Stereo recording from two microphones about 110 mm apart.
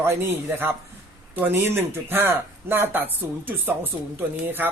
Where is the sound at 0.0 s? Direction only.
25° right (ahead or behind).